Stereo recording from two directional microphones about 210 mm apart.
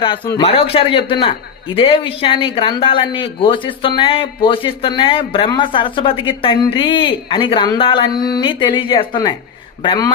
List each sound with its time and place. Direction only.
0.0 s speech: 20° left (ahead or behind)